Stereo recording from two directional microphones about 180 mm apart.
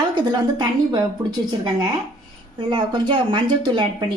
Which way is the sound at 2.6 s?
25° right (ahead or behind).